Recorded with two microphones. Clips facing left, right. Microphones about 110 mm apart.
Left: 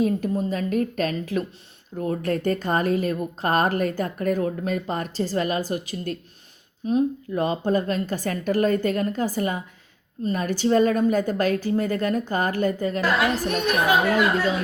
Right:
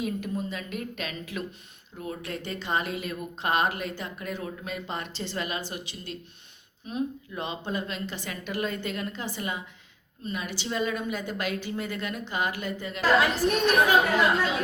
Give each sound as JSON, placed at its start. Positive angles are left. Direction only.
{"t": 0.0, "sound": "a woman's voice", "side_deg": 40}